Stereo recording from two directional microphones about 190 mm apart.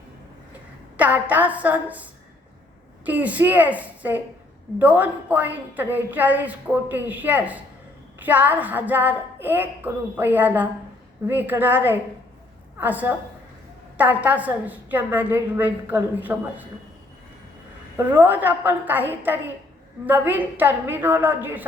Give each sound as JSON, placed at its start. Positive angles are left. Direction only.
{"t": 0.9, "sound": "a woman's voice", "side_deg": -10}
{"t": 3.1, "sound": "a woman's voice", "side_deg": -10}
{"t": 17.9, "sound": "a woman's voice", "side_deg": -10}